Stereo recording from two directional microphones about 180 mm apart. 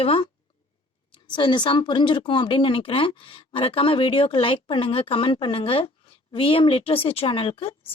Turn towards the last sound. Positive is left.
turn(degrees=30)  # may be behind; listen again after turning